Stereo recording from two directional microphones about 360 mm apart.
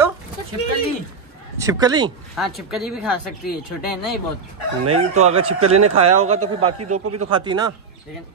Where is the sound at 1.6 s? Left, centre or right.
Centre.